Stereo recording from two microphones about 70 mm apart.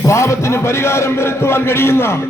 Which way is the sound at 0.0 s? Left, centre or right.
Left.